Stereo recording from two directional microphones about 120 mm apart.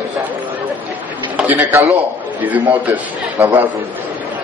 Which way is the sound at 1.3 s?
15° right (ahead or behind).